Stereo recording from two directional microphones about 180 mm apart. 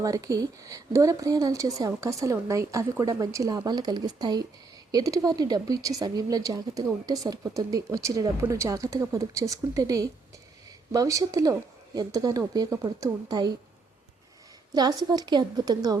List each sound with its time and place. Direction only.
0.0 s speech: 20° right (ahead or behind)
14.7 s speech: 20° right (ahead or behind)